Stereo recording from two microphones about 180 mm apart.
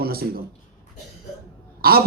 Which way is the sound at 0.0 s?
55° right (ahead or behind).